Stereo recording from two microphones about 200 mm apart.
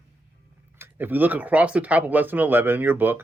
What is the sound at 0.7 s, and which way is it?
Speech, 10° right (ahead or behind).